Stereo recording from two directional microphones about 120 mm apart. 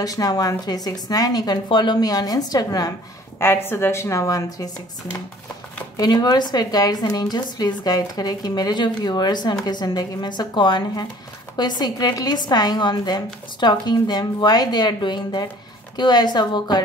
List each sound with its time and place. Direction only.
0.0 s a woman's voice: 30° left (ahead or behind)
3.3 s a woman's voice: 20° left (ahead or behind)
5.9 s a woman's voice: 35° left (ahead or behind)